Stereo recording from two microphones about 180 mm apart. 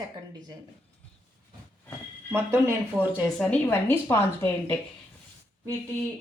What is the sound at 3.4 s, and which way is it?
A woman's voice, 10° left (ahead or behind).